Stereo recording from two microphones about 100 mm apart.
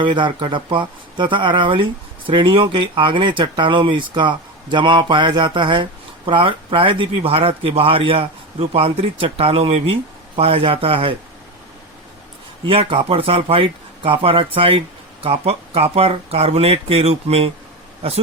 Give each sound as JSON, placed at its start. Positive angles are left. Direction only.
{"t": 0.0, "sound": "speech", "side_deg": -55}
{"t": 12.6, "sound": "speech", "side_deg": -65}